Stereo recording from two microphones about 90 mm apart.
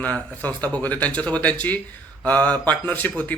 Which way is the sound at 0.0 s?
15° left (ahead or behind).